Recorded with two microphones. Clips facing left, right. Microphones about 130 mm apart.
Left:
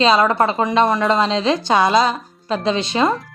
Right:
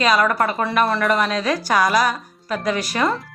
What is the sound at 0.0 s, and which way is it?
Speech, 25° left (ahead or behind).